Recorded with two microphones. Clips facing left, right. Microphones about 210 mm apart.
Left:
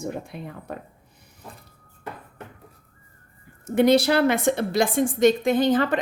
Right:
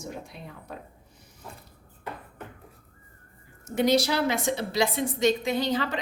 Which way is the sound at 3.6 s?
55° left (ahead or behind).